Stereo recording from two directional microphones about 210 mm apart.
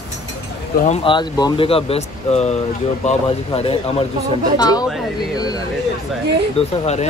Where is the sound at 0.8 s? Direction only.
30° left (ahead or behind).